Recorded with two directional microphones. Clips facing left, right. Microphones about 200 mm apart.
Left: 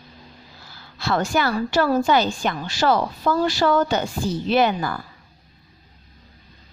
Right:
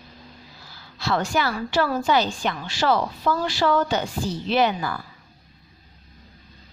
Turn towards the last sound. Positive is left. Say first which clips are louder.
# left 2 dB
turn(degrees=45)  # may be behind; listen again after turning